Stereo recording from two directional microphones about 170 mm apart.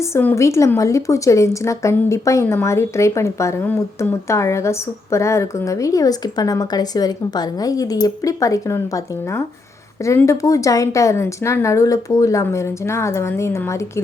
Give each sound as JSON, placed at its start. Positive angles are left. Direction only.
{"t": 0.1, "sound": "a woman's voice", "side_deg": 15}
{"t": 10.1, "sound": "a woman's voice", "side_deg": 15}